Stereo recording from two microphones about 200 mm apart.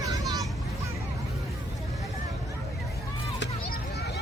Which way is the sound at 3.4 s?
55° left (ahead or behind).